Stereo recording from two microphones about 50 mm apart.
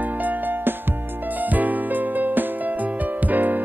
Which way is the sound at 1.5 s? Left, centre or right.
Right.